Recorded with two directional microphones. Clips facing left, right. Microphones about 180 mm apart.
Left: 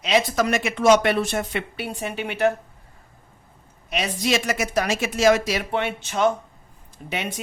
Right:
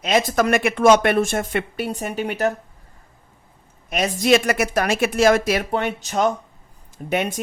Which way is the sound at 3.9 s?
45° right (ahead or behind).